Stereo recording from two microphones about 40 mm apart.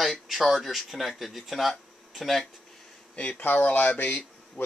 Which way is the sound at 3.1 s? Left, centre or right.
Left.